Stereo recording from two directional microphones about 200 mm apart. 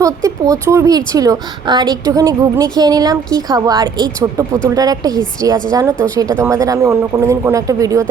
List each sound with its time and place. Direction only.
0.0 s a woman's voice: 15° right (ahead or behind)